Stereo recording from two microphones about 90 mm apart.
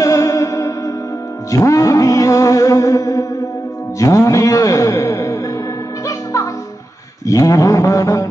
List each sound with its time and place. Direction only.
0.0 s music: 35° left (ahead or behind)
4.0 s a man's voice: 40° left (ahead or behind)
6.0 s music: 40° left (ahead or behind)
7.2 s a man's voice: 40° left (ahead or behind)